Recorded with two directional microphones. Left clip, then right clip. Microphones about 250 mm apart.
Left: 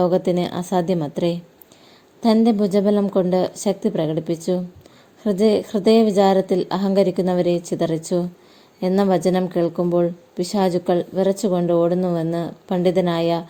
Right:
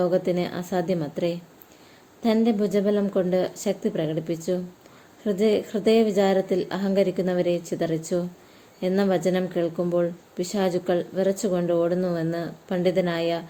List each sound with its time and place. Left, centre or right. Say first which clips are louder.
0.0 s speech: left 4 dB; left